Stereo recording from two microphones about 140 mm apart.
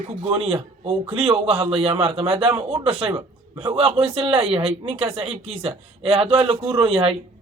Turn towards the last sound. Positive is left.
turn(degrees=-40)  # may be behind; listen again after turning